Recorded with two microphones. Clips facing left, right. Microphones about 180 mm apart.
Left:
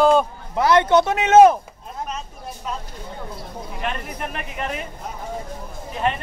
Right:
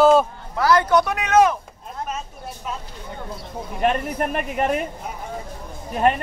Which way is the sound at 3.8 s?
45° right (ahead or behind).